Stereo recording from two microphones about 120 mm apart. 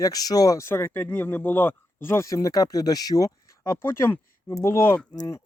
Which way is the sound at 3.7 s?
20° left (ahead or behind).